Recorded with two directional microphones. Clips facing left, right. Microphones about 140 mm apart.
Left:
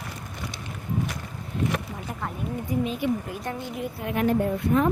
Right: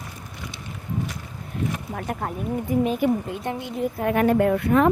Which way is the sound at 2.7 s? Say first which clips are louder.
Right 5 dB; 55° right (ahead or behind).